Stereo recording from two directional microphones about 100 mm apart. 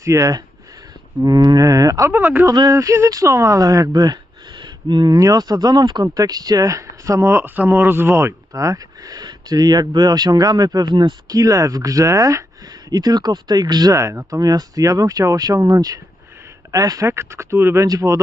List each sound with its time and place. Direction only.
0.0 s speech: 30° right (ahead or behind)
2.5 s speech: 40° right (ahead or behind)
13.9 s speech: 30° right (ahead or behind)